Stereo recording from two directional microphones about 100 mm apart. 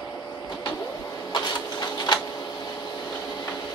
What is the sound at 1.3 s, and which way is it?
Printer, 45° left (ahead or behind).